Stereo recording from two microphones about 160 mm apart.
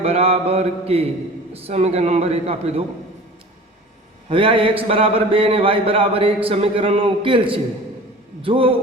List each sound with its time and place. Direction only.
0.0 s a man's voice: 40° right (ahead or behind)
4.3 s a man's voice: 35° right (ahead or behind)